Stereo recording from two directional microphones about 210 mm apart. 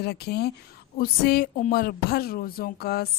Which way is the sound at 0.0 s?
50° left (ahead or behind).